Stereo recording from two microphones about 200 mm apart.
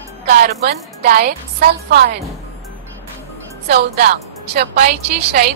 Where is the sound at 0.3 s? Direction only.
50° right (ahead or behind).